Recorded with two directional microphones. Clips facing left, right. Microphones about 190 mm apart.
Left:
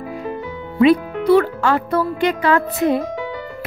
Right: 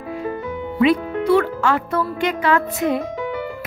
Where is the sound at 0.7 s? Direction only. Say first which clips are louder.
Left 3 dB; 35° left (ahead or behind).